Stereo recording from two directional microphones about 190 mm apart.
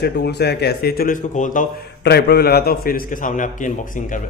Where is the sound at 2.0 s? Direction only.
60° left (ahead or behind); by 3.7 s 45° left (ahead or behind).